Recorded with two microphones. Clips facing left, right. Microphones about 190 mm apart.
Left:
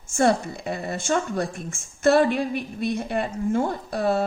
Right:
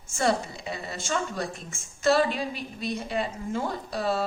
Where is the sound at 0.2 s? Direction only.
55° left (ahead or behind).